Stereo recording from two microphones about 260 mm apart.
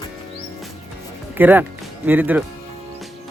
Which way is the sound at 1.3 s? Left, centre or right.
Centre.